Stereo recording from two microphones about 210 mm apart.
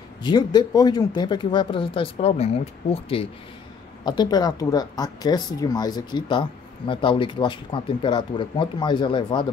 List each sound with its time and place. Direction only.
0.2 s speech: 20° left (ahead or behind)